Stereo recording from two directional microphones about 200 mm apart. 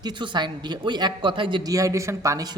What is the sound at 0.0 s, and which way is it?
A woman's voice, 25° right (ahead or behind).